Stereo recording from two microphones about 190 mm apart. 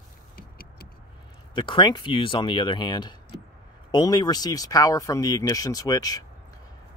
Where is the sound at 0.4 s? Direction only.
50° left (ahead or behind).